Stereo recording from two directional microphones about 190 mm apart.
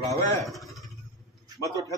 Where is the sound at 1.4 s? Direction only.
20° right (ahead or behind).